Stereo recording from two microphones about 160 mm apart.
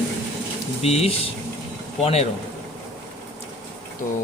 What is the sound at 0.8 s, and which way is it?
Speech, 40° left (ahead or behind).